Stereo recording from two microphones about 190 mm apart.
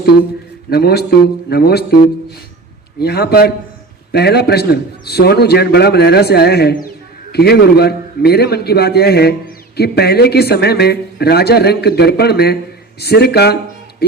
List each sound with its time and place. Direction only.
0.7 s a man's voice: 55° left (ahead or behind)
3.0 s a man's voice: 55° left (ahead or behind)